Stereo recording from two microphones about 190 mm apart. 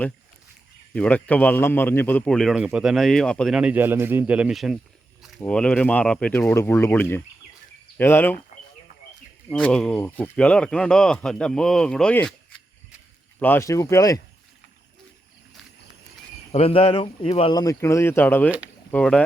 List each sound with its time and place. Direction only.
0.9 s speech: 5° left (ahead or behind)
9.5 s speech: 5° left (ahead or behind)
13.4 s speech: 10° left (ahead or behind)
16.5 s speech: 30° left (ahead or behind); by 19.2 s 5° left (ahead or behind)